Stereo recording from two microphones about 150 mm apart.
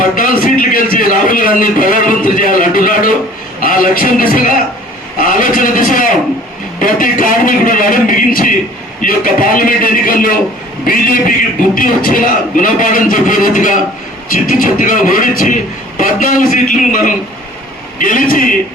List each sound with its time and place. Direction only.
0.0 s a man's voice: 70° left (ahead or behind)